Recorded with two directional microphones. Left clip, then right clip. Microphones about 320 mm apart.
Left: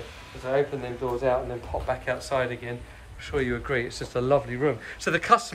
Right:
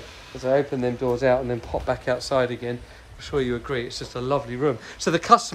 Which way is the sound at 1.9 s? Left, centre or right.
Centre.